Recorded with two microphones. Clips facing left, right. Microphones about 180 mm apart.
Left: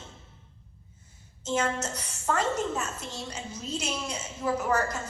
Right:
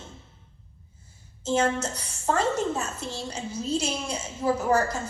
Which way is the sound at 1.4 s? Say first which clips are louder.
Right 4 dB; 30° right (ahead or behind).